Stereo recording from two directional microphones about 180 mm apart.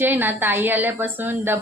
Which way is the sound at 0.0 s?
10° right (ahead or behind).